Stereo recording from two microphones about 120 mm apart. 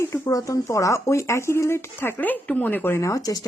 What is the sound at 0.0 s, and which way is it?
Speech, 25° left (ahead or behind).